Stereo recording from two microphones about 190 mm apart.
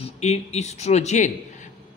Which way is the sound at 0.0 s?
35° left (ahead or behind).